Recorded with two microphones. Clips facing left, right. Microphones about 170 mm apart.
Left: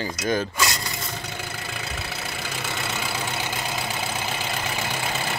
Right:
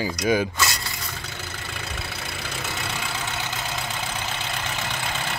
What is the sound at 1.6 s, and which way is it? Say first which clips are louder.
Vehicle: left 1 dB; 5° left (ahead or behind).